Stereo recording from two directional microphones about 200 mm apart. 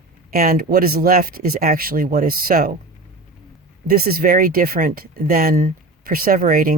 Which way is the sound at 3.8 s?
50° right (ahead or behind).